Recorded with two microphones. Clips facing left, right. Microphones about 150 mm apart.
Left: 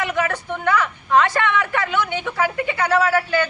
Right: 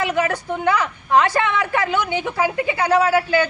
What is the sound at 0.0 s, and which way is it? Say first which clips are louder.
Speech: right 2 dB; 10° right (ahead or behind).